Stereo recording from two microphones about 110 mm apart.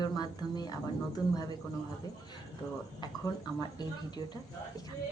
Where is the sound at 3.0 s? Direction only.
40° left (ahead or behind).